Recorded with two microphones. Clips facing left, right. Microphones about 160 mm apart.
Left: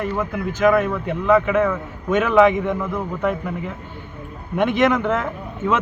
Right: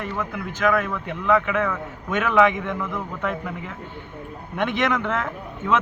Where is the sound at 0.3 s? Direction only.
45° left (ahead or behind).